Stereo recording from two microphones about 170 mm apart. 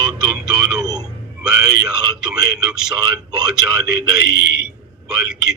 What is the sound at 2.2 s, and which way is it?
A man's voice, 5° right (ahead or behind).